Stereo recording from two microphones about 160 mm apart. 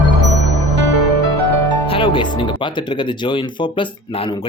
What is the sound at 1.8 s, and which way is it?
Speech, 35° left (ahead or behind).